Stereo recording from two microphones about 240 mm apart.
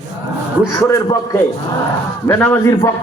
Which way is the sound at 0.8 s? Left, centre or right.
Centre.